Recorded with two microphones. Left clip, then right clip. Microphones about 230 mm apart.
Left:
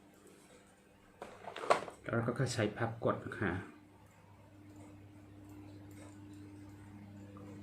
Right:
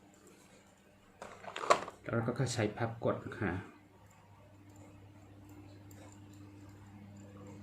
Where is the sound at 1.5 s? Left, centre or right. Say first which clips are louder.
Right 2 dB; right.